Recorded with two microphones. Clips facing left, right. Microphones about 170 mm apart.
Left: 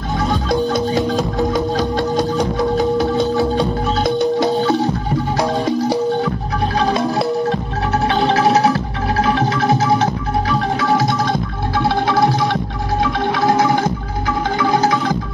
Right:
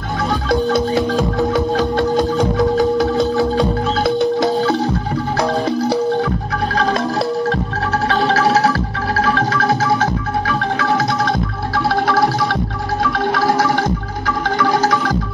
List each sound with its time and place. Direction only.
1.1 s music: 10° right (ahead or behind)
6.7 s music: 10° left (ahead or behind)
11.7 s music: 20° left (ahead or behind)